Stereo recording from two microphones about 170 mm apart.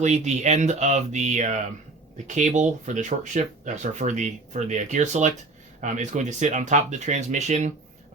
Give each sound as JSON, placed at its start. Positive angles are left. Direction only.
{"t": 0.0, "sound": "speech", "side_deg": -40}